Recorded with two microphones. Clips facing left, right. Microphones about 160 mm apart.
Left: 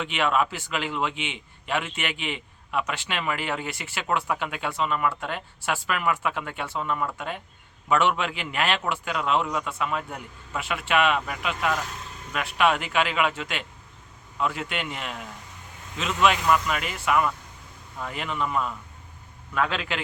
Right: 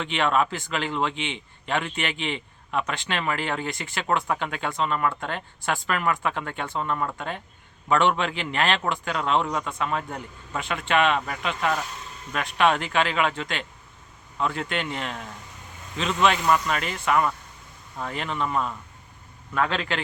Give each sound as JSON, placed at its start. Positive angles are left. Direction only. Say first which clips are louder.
{"t": 0.0, "sound": "a man's voice", "louder": "right 1 dB", "side_deg": 10}
{"t": 19.5, "sound": "a man's voice", "louder": "right 1 dB", "side_deg": 5}